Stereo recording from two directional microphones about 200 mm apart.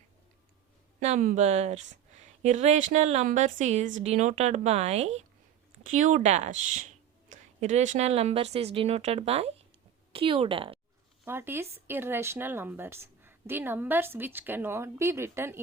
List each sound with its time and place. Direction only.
0.9 s a woman's voice: 40° right (ahead or behind)
11.3 s speech: 10° right (ahead or behind)